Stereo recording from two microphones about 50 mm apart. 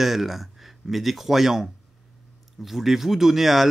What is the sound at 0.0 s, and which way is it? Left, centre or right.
Speech, centre.